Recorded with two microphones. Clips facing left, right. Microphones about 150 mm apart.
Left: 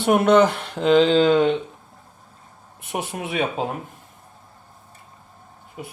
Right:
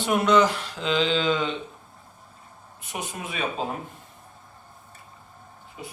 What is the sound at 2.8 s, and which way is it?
Speech, 60° left (ahead or behind).